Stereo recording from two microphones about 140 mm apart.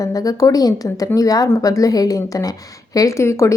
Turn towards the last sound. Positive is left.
turn(degrees=20)  # may be behind; listen again after turning